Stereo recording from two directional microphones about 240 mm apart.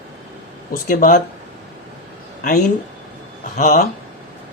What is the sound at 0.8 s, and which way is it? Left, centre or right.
Speech, left.